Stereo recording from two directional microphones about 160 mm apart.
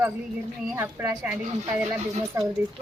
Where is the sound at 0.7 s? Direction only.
15° right (ahead or behind).